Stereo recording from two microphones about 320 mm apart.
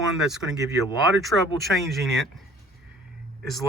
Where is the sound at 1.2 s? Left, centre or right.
Centre.